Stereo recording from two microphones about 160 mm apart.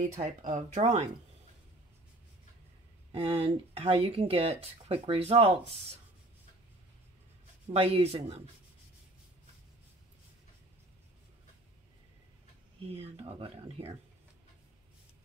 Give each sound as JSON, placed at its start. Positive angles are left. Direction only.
{"t": 0.2, "sound": "speech", "side_deg": -45}
{"t": 3.1, "sound": "speech", "side_deg": -35}
{"t": 7.7, "sound": "speech", "side_deg": -40}
{"t": 12.9, "sound": "speech", "side_deg": -40}